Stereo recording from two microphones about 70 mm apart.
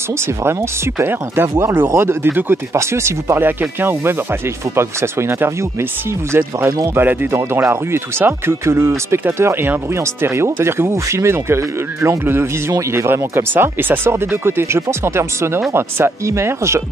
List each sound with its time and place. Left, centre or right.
0.4 s speech: right
2.7 s speech: right